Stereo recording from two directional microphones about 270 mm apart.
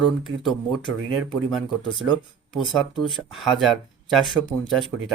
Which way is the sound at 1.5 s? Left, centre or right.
Centre.